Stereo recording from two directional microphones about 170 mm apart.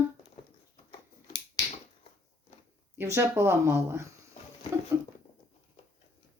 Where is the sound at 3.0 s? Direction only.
15° right (ahead or behind).